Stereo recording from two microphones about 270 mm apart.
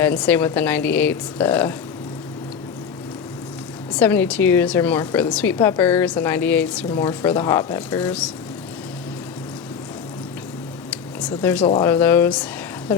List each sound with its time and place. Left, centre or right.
0.0 s a woman's voice: centre
3.9 s a woman's voice: centre
11.3 s a woman's voice: centre
11.6 s speech: centre
11.9 s a woman's voice: centre